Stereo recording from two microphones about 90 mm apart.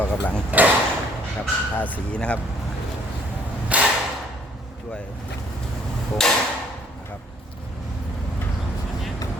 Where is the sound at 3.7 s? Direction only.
15° right (ahead or behind).